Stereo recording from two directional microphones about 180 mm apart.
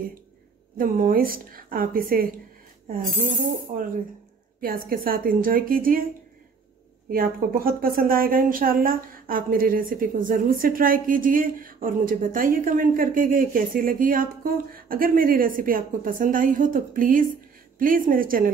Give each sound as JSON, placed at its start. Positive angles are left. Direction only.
{"t": 0.7, "sound": "a woman's voice", "side_deg": -50}
{"t": 3.7, "sound": "a woman's voice", "side_deg": -50}
{"t": 7.1, "sound": "a woman's voice", "side_deg": -55}